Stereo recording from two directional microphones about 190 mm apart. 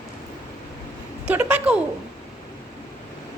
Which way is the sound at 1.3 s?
5° right (ahead or behind).